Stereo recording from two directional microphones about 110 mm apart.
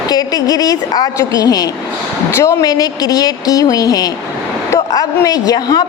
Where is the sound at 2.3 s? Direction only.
25° left (ahead or behind).